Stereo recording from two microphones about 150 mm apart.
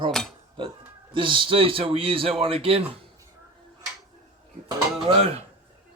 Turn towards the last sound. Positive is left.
turn(degrees=-40)  # may be behind; listen again after turning